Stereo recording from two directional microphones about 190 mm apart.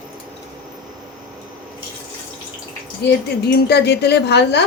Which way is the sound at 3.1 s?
60° left (ahead or behind).